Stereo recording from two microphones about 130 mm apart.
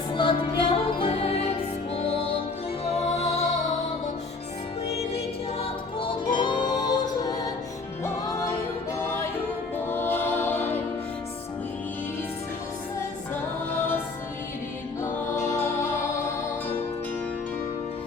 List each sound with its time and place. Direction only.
0.2 s music: 40° left (ahead or behind)
2.8 s music: 60° left (ahead or behind)
6.0 s music: 40° left (ahead or behind)
9.9 s choir: 15° left (ahead or behind)
15.4 s music: 20° left (ahead or behind)